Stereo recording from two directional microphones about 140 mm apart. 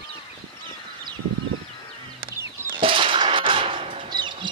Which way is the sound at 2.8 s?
40° right (ahead or behind).